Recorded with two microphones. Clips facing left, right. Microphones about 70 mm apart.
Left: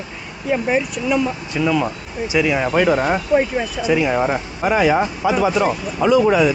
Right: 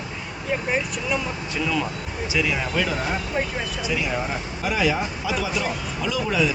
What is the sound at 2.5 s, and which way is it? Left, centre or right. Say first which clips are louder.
Speech: left 9 dB; left.